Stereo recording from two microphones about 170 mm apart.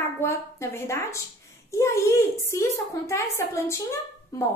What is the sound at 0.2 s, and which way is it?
A woman's voice, 15° left (ahead or behind).